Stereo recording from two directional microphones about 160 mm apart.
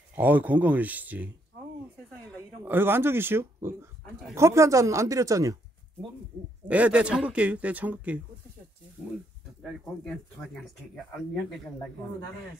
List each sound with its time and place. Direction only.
0.1 s speech: 10° right (ahead or behind)
2.6 s speech: 15° right (ahead or behind)
6.7 s speech: 10° right (ahead or behind)
9.6 s a sound: centre (ahead or behind)